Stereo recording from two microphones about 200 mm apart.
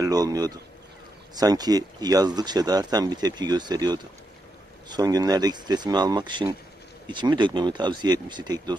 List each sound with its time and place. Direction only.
0.0 s speech: 20° right (ahead or behind)